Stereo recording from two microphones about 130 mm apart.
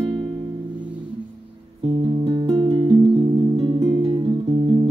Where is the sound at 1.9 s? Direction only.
35° right (ahead or behind).